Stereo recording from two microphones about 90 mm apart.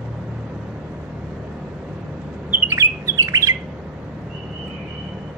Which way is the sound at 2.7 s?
35° right (ahead or behind).